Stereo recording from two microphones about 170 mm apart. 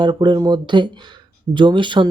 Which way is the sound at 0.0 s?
25° right (ahead or behind).